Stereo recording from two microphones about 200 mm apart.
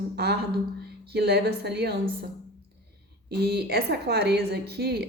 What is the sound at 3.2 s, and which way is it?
A woman's voice, 55° right (ahead or behind).